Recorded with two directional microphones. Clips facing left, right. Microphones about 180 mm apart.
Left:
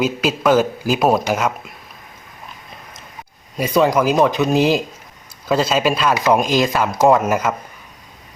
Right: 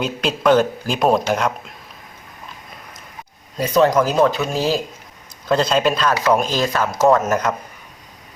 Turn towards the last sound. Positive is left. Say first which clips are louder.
# left 1 dB
turn(degrees=10)  # may be behind; listen again after turning